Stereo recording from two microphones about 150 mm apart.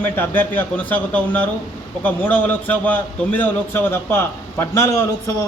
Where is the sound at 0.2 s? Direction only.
10° left (ahead or behind).